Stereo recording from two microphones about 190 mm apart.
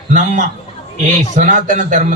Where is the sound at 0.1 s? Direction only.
40° right (ahead or behind).